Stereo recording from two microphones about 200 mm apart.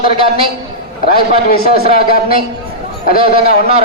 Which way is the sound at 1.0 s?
50° left (ahead or behind).